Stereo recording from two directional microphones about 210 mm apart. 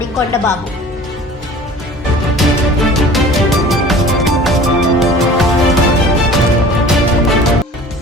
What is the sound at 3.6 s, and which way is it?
Music, centre (ahead or behind).